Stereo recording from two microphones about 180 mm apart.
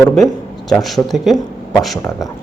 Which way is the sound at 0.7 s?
Centre (ahead or behind).